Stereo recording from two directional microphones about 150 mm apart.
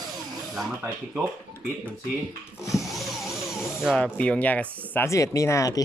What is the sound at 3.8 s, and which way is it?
Speech, 5° left (ahead or behind).